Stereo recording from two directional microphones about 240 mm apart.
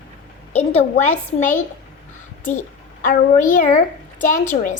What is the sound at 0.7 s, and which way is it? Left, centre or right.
Speech, left.